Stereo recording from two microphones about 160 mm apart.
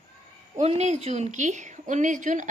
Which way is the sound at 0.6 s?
40° right (ahead or behind).